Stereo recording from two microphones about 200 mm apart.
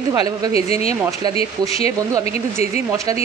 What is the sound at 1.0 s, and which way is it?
Speech, 15° right (ahead or behind).